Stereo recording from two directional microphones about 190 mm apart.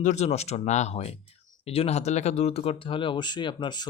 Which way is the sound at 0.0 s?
35° left (ahead or behind).